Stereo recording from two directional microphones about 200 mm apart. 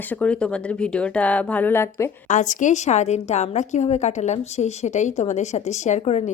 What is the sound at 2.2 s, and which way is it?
Speech, 40° left (ahead or behind).